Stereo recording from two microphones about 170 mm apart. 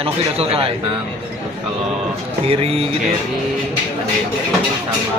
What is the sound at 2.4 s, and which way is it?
Speech, 35° right (ahead or behind).